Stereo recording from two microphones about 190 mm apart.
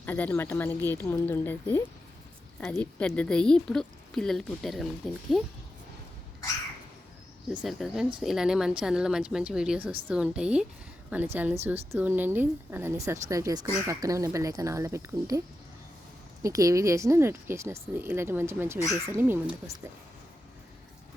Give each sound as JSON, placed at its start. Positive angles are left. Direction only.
{"t": 0.0, "sound": "speech", "side_deg": 10}
{"t": 7.5, "sound": "speech", "side_deg": 0}
{"t": 16.4, "sound": "speech", "side_deg": -15}